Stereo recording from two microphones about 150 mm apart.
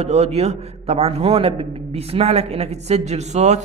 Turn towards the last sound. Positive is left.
turn(degrees=-50)  # may be behind; listen again after turning